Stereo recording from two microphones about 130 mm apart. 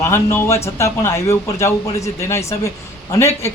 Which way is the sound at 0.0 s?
20° left (ahead or behind).